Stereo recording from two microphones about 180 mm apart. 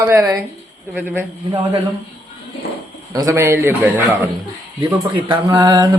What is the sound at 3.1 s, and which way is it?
Speech, 15° right (ahead or behind).